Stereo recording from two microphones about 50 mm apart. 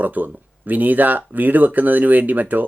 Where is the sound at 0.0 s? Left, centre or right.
Right.